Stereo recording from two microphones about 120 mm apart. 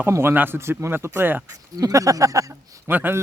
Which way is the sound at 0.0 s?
20° right (ahead or behind).